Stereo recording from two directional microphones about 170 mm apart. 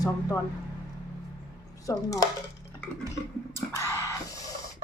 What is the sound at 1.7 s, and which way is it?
Speech, 20° left (ahead or behind).